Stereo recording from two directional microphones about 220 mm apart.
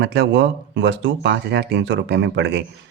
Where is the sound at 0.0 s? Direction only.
50° right (ahead or behind).